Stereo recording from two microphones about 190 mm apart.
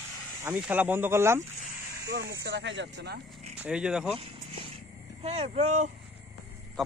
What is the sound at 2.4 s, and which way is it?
Speech, 70° right (ahead or behind).